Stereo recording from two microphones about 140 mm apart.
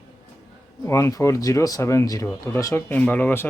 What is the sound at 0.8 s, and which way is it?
Speech, 20° left (ahead or behind).